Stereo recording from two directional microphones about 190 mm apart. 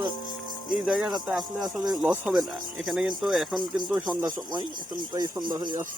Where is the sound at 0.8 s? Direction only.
Centre (ahead or behind).